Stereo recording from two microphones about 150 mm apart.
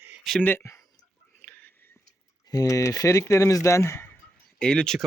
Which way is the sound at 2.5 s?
25° left (ahead or behind).